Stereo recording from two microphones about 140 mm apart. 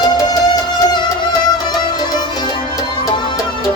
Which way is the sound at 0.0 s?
30° left (ahead or behind).